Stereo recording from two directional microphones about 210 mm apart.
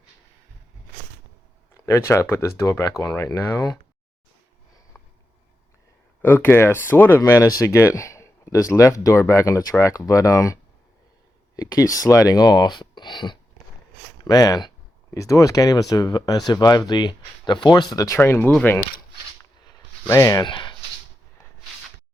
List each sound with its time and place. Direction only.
1.7 s speech: 15° left (ahead or behind)
4.9 s a sound: 10° left (ahead or behind)
6.2 s speech: 10° left (ahead or behind)
20.1 s speech: 15° left (ahead or behind)